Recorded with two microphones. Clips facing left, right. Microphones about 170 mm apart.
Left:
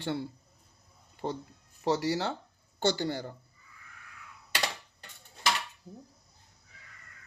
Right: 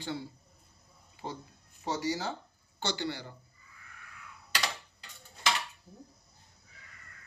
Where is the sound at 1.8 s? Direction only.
70° left (ahead or behind).